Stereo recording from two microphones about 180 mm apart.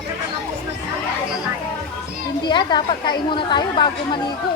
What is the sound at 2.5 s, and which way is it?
A woman's voice, 25° left (ahead or behind).